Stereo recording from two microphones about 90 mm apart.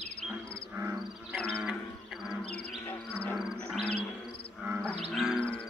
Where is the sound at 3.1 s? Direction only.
15° left (ahead or behind).